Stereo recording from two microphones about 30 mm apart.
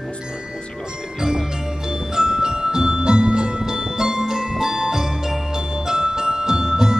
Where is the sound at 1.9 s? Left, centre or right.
Right.